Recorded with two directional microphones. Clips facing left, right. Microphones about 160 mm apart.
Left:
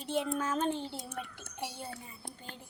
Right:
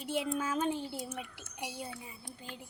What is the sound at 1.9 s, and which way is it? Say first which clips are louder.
Speech: even; 45° left (ahead or behind).